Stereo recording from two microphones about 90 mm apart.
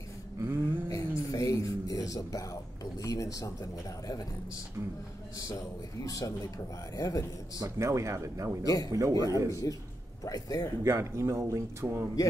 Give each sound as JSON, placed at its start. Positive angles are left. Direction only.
{"t": 0.4, "sound": "a sound", "side_deg": -25}
{"t": 0.8, "sound": "a sound", "side_deg": 40}
{"t": 5.5, "sound": "a man's voice", "side_deg": 40}
{"t": 7.6, "sound": "speech", "side_deg": -35}
{"t": 8.6, "sound": "a man's voice", "side_deg": 40}
{"t": 10.8, "sound": "speech", "side_deg": -35}